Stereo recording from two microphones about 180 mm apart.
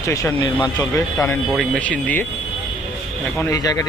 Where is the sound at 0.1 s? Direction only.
15° left (ahead or behind).